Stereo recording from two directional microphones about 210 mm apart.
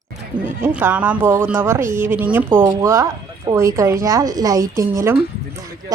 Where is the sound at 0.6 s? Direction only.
10° right (ahead or behind).